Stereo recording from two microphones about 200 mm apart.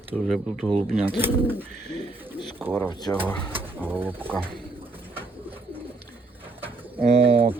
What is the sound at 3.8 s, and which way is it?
Speech, 10° right (ahead or behind).